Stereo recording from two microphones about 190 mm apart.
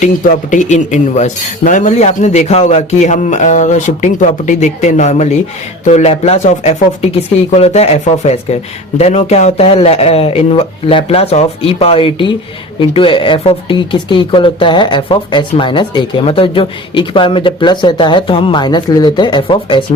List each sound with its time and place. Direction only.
0.0 s speech: 40° left (ahead or behind)